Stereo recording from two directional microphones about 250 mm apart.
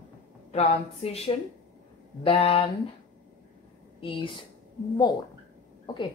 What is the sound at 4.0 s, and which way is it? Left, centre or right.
Speech, left.